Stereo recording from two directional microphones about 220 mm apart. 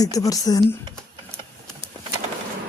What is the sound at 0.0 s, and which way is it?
Speech, 15° left (ahead or behind).